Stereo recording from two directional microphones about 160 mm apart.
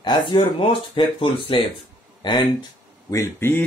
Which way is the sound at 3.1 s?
15° left (ahead or behind).